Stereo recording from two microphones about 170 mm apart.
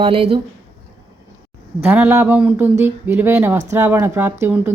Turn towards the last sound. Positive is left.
turn(degrees=-10)  # may be behind; listen again after turning